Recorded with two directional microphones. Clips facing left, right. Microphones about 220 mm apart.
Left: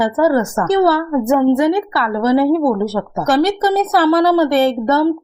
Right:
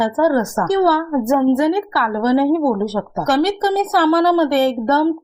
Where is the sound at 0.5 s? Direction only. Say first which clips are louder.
Left 2 dB; 25° left (ahead or behind).